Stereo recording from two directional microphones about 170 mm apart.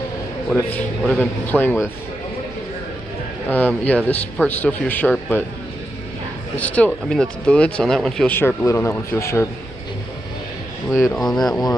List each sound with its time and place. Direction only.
0.5 s speech: 5° left (ahead or behind)
3.5 s speech: 10° left (ahead or behind)
6.5 s speech: 10° left (ahead or behind)
10.9 s speech: 15° left (ahead or behind)
11.1 s speech: centre (ahead or behind)